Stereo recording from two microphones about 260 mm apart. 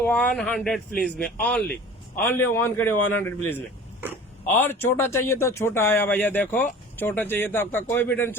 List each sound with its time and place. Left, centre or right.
0.1 s speech: centre